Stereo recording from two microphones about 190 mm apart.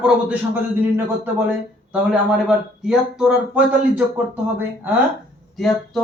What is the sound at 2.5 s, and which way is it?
Speech, centre (ahead or behind).